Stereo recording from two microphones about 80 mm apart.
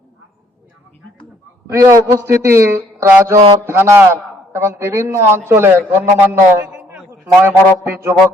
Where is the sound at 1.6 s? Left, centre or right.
Right.